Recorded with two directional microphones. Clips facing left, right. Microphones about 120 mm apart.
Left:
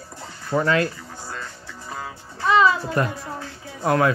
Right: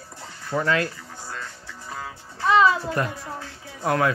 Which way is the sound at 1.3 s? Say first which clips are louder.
Even; 30° left (ahead or behind).